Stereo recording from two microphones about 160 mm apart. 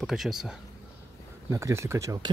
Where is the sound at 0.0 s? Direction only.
Centre (ahead or behind).